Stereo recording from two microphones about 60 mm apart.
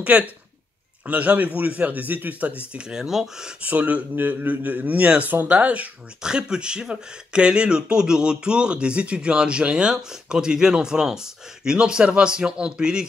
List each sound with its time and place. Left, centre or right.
0.0 s a man's voice: right
2.7 s speech: centre
3.6 s a man's voice: right